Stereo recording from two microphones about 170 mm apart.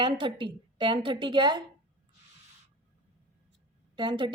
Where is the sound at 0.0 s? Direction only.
30° right (ahead or behind).